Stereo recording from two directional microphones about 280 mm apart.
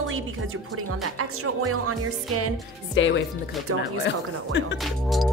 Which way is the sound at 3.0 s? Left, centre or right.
Left.